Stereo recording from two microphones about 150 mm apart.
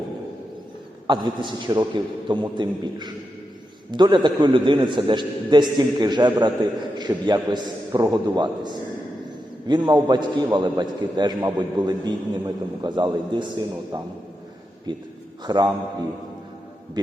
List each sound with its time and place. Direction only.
1.0 s a man's voice: 30° right (ahead or behind)